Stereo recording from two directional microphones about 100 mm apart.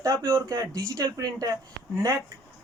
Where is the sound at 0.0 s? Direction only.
30° right (ahead or behind).